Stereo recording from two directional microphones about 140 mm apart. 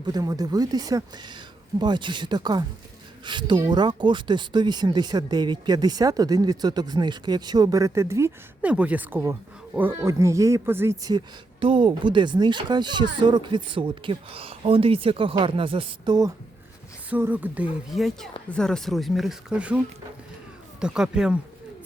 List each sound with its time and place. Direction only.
0.0 s speech: 30° right (ahead or behind)
11.6 s speech: 40° right (ahead or behind)
17.1 s speech: 15° right (ahead or behind)
17.9 s speech: centre (ahead or behind)
20.8 s speech: 5° right (ahead or behind)